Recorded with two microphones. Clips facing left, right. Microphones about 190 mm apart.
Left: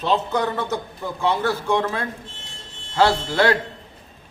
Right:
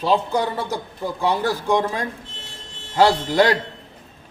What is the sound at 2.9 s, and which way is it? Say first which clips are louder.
Speech: right 2 dB; 15° right (ahead or behind).